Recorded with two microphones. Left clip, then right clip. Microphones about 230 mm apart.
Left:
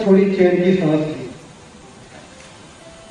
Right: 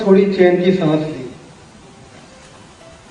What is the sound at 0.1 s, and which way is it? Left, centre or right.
Speech, left.